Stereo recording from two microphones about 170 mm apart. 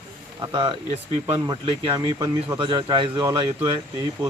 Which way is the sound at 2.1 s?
20° right (ahead or behind).